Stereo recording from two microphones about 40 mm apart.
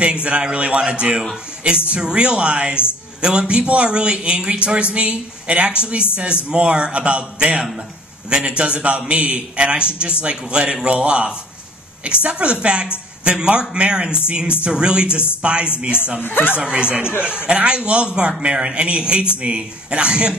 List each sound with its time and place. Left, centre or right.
0.0 s a man's voice: right
16.2 s speech: left
16.5 s a man's voice: right